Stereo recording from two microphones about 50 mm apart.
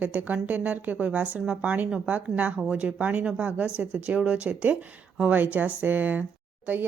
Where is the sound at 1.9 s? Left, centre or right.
Right.